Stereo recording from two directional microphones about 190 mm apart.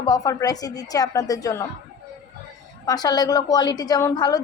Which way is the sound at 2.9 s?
20° left (ahead or behind).